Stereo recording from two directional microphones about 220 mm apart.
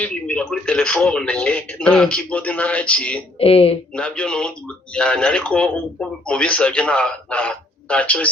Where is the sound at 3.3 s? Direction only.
25° left (ahead or behind).